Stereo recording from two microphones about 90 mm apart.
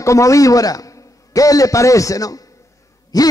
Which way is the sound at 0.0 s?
35° left (ahead or behind).